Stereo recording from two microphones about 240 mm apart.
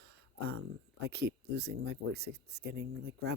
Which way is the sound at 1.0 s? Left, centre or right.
Right.